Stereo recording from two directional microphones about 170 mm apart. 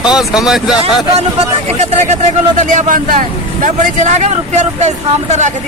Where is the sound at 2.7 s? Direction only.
50° right (ahead or behind).